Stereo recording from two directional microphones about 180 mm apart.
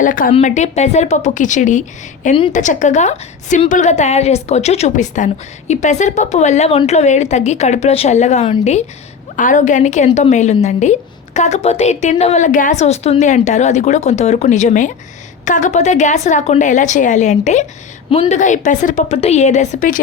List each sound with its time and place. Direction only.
0.0 s a woman's voice: 45° left (ahead or behind)